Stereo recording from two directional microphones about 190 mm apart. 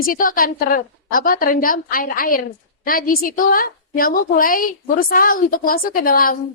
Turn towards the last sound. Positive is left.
turn(degrees=50)  # may be behind; listen again after turning